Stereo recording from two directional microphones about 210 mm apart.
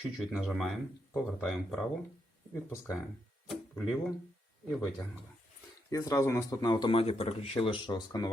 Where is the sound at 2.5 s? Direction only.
10° left (ahead or behind).